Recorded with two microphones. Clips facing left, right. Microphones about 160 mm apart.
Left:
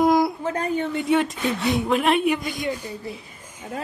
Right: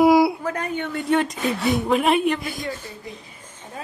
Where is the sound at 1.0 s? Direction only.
Centre (ahead or behind).